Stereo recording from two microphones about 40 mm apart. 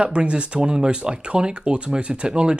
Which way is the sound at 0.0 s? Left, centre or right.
Right.